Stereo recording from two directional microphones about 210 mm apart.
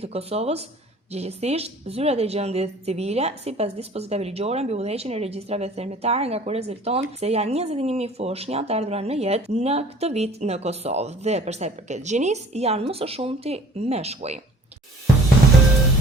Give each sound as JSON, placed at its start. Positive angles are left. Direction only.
{"t": 0.0, "sound": "a woman's voice", "side_deg": -30}